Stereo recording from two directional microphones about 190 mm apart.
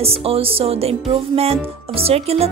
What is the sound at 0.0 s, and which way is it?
Speech, 30° right (ahead or behind).